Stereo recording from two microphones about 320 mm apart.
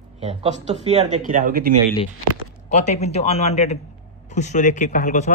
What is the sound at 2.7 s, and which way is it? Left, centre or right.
Speech, left.